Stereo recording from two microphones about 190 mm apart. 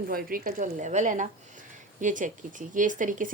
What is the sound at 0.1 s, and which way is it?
Speech, 50° right (ahead or behind).